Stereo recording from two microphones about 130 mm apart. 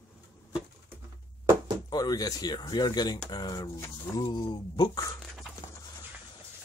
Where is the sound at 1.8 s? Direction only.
30° left (ahead or behind).